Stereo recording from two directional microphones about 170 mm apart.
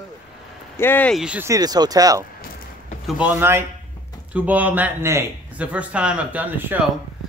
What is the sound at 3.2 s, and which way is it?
Speech, 10° right (ahead or behind).